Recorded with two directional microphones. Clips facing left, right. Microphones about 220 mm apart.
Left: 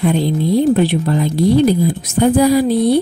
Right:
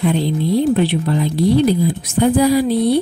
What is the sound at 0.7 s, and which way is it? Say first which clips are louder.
Speech: left 2 dB; 45° left (ahead or behind).